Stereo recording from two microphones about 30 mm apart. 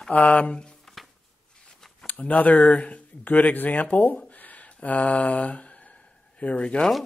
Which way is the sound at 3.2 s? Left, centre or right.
Left.